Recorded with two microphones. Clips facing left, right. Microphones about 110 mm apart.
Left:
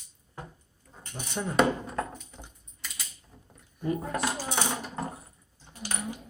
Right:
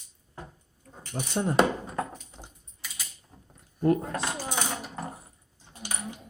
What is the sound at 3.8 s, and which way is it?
Speech, 60° right (ahead or behind).